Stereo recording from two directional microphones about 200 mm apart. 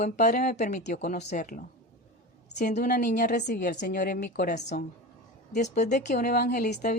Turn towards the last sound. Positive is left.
turn(degrees=40)  # may be behind; listen again after turning